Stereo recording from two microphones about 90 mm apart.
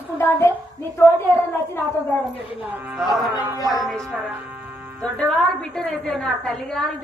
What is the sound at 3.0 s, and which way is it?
Speech, 5° right (ahead or behind).